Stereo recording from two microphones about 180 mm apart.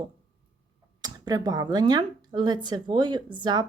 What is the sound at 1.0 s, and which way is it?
Speech, 20° right (ahead or behind).